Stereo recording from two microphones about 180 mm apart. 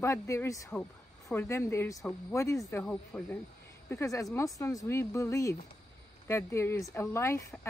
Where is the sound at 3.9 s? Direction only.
15° left (ahead or behind).